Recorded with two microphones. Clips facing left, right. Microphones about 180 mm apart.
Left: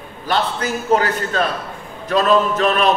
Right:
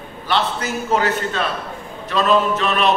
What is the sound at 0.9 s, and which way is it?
Speech, 40° left (ahead or behind).